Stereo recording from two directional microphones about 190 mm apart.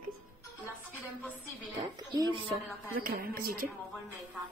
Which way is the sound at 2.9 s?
50° right (ahead or behind).